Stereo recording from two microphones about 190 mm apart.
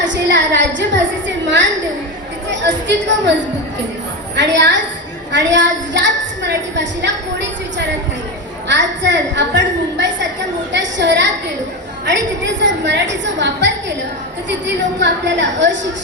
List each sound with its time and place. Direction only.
0.0 s a woman's voice: 70° right (ahead or behind)
1.5 s a sound: 70° right (ahead or behind)
2.5 s a woman's voice: 70° right (ahead or behind)
4.4 s a woman's voice: 70° right (ahead or behind)